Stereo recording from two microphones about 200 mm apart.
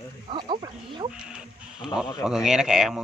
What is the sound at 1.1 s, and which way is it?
Speech, 5° right (ahead or behind).